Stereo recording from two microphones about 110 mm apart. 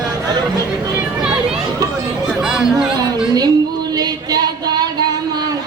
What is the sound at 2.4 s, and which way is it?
Music, 5° right (ahead or behind).